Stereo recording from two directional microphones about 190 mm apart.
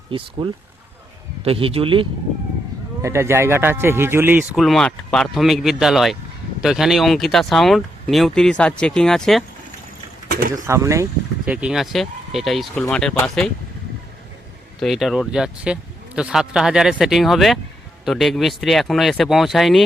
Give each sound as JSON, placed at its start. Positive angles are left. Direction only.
{"t": 0.1, "sound": "a man's voice", "side_deg": -25}
{"t": 3.0, "sound": "a man's voice", "side_deg": -15}
{"t": 10.5, "sound": "a man's voice", "side_deg": -15}
{"t": 14.8, "sound": "speech", "side_deg": 0}